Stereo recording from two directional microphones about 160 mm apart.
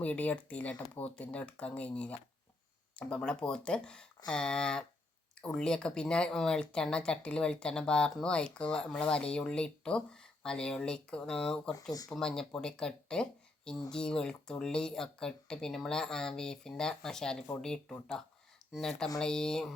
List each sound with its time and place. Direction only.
0.0 s speech: 10° left (ahead or behind)
11.7 s speech: 20° left (ahead or behind)
12.1 s speech: 5° left (ahead or behind)